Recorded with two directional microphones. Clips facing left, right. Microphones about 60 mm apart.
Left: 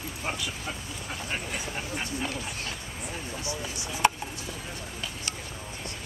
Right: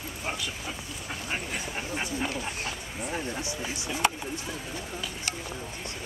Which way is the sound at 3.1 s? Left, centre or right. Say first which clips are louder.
Right 2 dB; right.